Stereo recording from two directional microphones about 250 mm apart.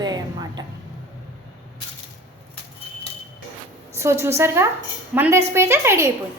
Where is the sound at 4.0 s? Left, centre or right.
Centre.